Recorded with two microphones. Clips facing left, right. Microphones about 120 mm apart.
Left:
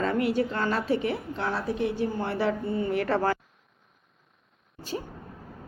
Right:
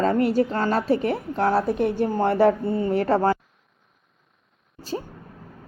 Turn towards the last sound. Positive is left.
turn(degrees=-35)  # may be behind; listen again after turning